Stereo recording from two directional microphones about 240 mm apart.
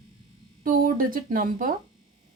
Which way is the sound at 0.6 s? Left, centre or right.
Right.